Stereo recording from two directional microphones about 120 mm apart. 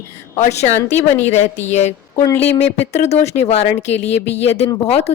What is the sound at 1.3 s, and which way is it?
Speech, 70° left (ahead or behind).